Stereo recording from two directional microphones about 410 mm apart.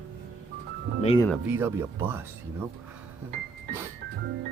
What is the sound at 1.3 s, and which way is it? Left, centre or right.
Speech, centre.